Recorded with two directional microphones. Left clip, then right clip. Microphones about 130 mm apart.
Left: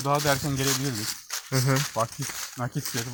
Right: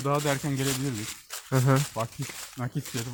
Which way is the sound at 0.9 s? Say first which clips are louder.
Left 5 dB; 25° left (ahead or behind).